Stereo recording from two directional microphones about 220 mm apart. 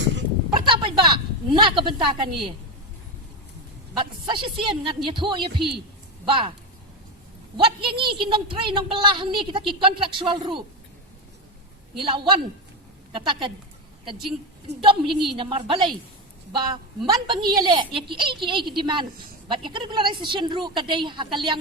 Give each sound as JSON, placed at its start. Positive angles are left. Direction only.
{"t": 0.0, "sound": "speech", "side_deg": -55}
{"t": 0.5, "sound": "a sound", "side_deg": -20}
{"t": 3.9, "sound": "a woman's voice", "side_deg": -20}
{"t": 7.9, "sound": "a woman's voice", "side_deg": -20}
{"t": 11.9, "sound": "a woman's voice", "side_deg": -20}
{"t": 17.1, "sound": "a woman's voice", "side_deg": -20}